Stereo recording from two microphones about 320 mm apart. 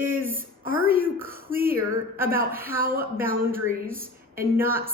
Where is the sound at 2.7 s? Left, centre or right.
Right.